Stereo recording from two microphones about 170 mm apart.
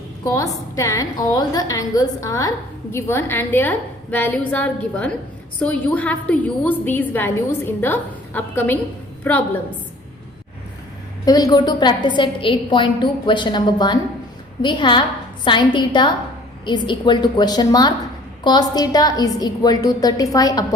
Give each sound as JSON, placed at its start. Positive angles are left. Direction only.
{"t": 0.3, "sound": "a woman's voice", "side_deg": 20}
{"t": 11.3, "sound": "a woman's voice", "side_deg": 20}